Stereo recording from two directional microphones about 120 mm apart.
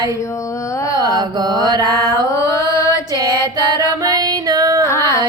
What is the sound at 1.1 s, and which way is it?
Mantra, 35° right (ahead or behind).